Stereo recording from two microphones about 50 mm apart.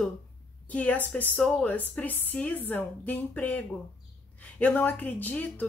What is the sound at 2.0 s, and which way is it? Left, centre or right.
A woman's voice, left.